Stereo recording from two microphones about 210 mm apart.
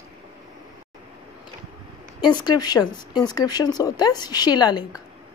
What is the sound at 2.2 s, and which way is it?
A woman's voice, 20° left (ahead or behind).